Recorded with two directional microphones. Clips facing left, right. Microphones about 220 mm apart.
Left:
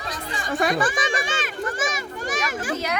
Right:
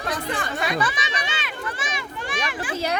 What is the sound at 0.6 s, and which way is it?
Children playing, 50° left (ahead or behind).